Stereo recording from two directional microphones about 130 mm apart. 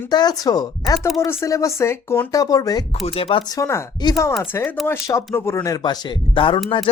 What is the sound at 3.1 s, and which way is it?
Speech, 45° left (ahead or behind).